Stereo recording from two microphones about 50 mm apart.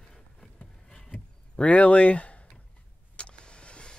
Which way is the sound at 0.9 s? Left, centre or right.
Left.